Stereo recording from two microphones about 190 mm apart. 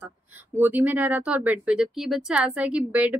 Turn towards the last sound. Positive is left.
turn(degrees=-10)  # may be behind; listen again after turning